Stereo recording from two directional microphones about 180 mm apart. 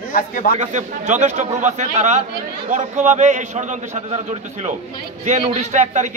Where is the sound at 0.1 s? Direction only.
50° left (ahead or behind).